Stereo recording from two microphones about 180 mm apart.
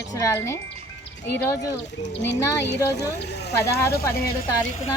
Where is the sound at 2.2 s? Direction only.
70° left (ahead or behind).